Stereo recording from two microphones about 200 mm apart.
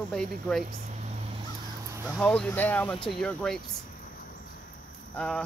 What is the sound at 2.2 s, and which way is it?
Speech, 5° left (ahead or behind).